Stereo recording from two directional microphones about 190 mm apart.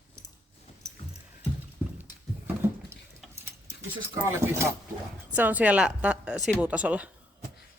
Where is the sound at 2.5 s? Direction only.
10° right (ahead or behind).